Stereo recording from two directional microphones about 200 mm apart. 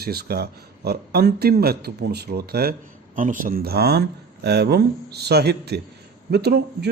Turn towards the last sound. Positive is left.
turn(degrees=-55)  # may be behind; listen again after turning